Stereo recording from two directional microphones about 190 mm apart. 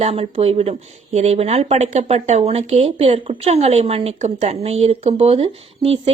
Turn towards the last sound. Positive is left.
turn(degrees=-30)  # may be behind; listen again after turning